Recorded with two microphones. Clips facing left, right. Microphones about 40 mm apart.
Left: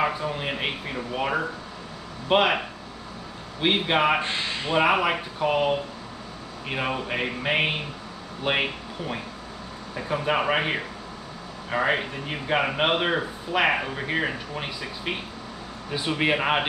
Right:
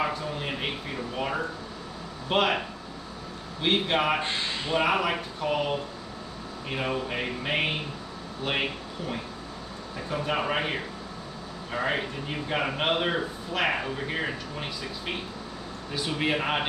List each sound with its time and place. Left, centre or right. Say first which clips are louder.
0.0 s a man's voice: left 4 dB; centre
3.6 s a man's voice: left 3 dB; centre